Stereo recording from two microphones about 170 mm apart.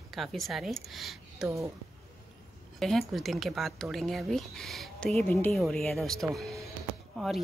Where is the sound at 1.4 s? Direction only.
15° right (ahead or behind).